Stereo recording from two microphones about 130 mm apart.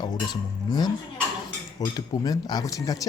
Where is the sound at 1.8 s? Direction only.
30° left (ahead or behind).